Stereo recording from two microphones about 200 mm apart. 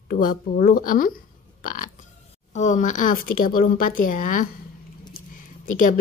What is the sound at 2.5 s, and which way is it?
A woman's voice, 40° left (ahead or behind).